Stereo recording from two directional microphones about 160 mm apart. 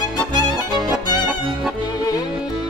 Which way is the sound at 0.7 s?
25° right (ahead or behind).